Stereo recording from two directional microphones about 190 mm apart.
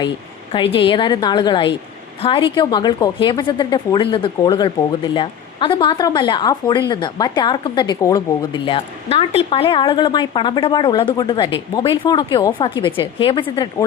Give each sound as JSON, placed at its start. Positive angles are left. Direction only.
{"t": 0.5, "sound": "speech", "side_deg": 25}